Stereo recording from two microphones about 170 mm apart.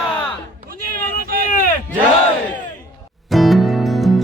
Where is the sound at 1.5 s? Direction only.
55° left (ahead or behind).